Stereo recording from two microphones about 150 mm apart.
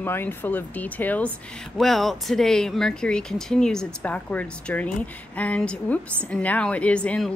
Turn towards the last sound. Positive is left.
turn(degrees=5)  # may be behind; listen again after turning